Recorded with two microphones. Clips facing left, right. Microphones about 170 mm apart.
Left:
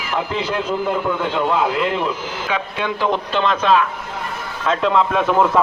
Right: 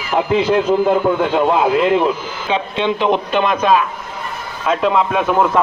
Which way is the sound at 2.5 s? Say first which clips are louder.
Right 6 dB; 25° right (ahead or behind).